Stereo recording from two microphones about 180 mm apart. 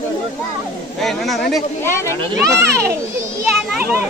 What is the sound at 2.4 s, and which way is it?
A child's voice, 15° right (ahead or behind).